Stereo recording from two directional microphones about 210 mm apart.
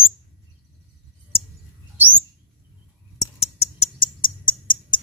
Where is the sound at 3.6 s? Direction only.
25° left (ahead or behind).